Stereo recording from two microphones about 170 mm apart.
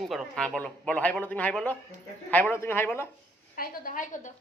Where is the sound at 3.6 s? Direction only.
55° left (ahead or behind).